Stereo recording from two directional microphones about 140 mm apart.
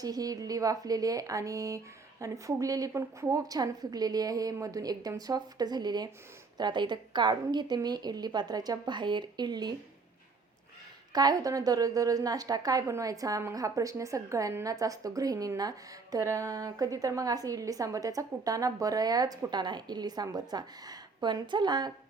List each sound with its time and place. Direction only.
0.0 s a woman's voice: 25° right (ahead or behind)
11.1 s a woman's voice: 30° right (ahead or behind)